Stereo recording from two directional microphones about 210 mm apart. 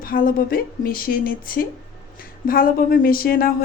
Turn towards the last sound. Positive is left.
turn(degrees=45)  # may be behind; listen again after turning